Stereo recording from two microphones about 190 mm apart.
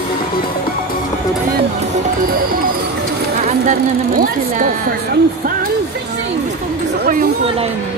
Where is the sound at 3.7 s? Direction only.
45° right (ahead or behind).